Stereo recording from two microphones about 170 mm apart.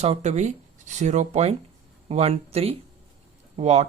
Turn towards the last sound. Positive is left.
turn(degrees=-40)  # may be behind; listen again after turning